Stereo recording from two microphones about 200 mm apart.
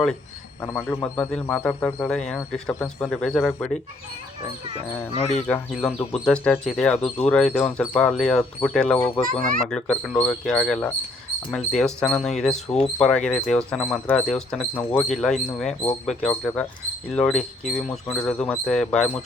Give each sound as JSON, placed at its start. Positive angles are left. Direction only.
{"t": 0.9, "sound": "speech", "side_deg": 10}
{"t": 5.1, "sound": "speech", "side_deg": 30}
{"t": 5.5, "sound": "speech", "side_deg": 10}